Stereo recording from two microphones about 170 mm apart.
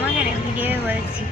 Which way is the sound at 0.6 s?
10° right (ahead or behind).